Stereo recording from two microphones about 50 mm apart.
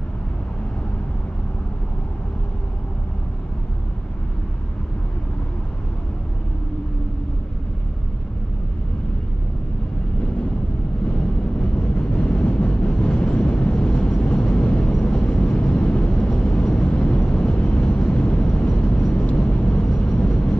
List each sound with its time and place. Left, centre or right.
11.1 s vehicle: centre